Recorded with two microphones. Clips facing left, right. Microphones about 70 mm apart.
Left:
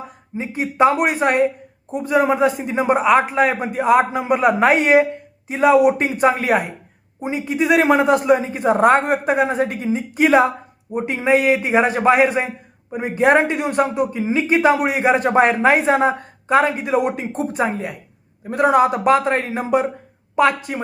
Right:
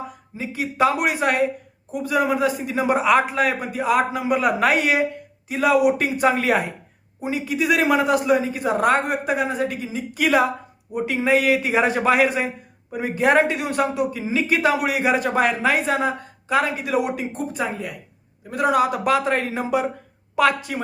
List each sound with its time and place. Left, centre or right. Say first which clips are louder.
0.3 s a man's voice: left 4 dB; left
17.6 s a man's voice: left 6 dB; left